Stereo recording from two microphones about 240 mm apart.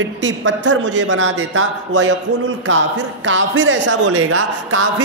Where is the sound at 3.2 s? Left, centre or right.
Right.